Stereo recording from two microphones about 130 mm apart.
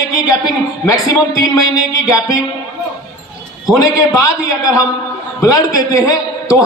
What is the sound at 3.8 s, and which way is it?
A man's voice, 25° left (ahead or behind).